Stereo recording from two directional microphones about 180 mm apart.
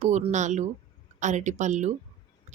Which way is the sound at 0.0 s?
40° right (ahead or behind).